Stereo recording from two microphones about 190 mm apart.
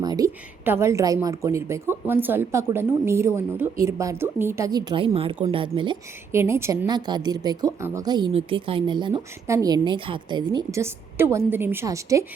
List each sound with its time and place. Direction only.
0.0 s a woman's voice: 20° right (ahead or behind)
6.3 s a woman's voice: 15° right (ahead or behind)